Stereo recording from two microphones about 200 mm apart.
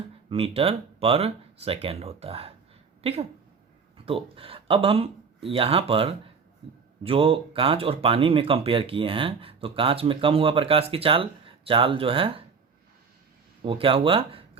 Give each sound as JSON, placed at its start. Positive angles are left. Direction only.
{"t": 0.3, "sound": "speech", "side_deg": -30}
{"t": 13.6, "sound": "speech", "side_deg": -25}